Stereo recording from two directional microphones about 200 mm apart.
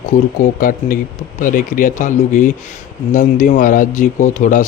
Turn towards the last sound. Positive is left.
turn(degrees=40)  # may be behind; listen again after turning